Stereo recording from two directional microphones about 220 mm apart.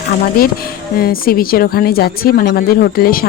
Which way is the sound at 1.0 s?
40° left (ahead or behind).